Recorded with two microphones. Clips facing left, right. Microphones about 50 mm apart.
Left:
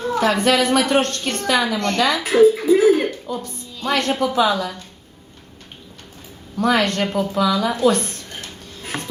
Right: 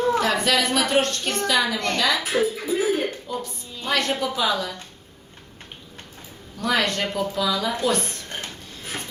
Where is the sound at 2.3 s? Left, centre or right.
Left.